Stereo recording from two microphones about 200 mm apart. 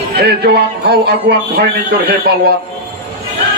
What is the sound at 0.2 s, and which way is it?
A man's voice, 55° right (ahead or behind).